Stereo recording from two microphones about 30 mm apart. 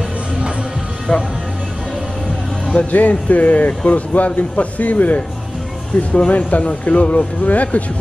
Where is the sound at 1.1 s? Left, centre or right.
Left.